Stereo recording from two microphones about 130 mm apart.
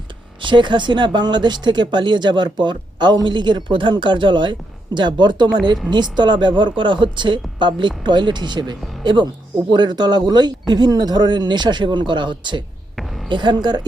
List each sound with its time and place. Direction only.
0.4 s speech: 40° right (ahead or behind)